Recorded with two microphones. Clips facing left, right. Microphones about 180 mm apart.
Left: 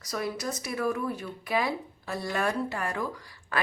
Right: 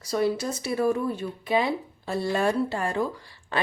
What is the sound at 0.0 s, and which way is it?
A woman's voice, 30° right (ahead or behind).